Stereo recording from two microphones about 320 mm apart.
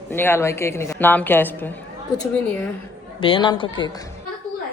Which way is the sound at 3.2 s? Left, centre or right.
Centre.